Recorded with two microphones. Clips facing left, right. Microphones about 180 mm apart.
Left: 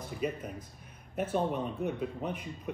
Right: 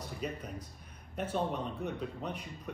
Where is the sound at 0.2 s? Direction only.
5° left (ahead or behind).